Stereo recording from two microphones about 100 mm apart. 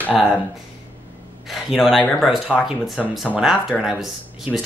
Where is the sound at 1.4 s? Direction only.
Centre (ahead or behind).